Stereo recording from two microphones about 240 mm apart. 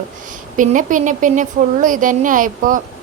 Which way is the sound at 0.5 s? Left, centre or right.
Right.